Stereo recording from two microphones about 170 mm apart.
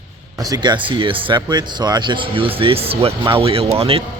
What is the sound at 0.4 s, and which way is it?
Speech, 25° right (ahead or behind).